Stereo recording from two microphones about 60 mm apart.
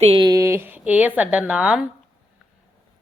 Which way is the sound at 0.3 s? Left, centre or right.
Right.